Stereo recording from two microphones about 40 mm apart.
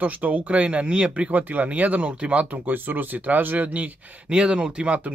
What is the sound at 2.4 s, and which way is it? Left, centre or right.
Speech, right.